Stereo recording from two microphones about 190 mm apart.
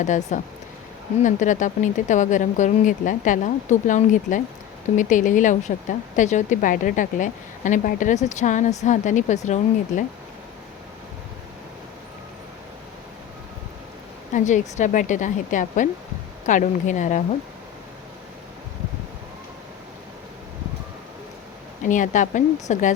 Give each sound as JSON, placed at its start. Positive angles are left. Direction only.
{"t": 0.0, "sound": "speech", "side_deg": 40}
{"t": 14.3, "sound": "speech", "side_deg": 40}
{"t": 21.8, "sound": "speech", "side_deg": 40}